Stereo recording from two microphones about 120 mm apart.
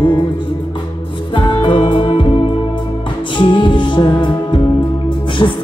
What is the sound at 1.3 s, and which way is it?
Music, 45° left (ahead or behind).